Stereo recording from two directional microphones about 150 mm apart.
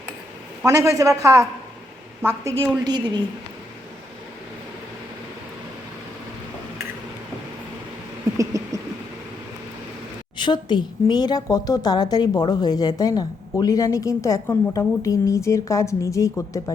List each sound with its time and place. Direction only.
0.6 s a woman's voice: 20° right (ahead or behind)
8.4 s a sound: 20° right (ahead or behind)
10.3 s a woman's voice: 30° left (ahead or behind)